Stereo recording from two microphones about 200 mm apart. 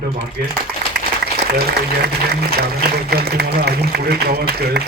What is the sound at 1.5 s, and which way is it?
A man's voice, 55° right (ahead or behind).